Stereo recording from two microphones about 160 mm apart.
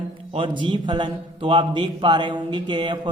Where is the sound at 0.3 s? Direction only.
30° right (ahead or behind).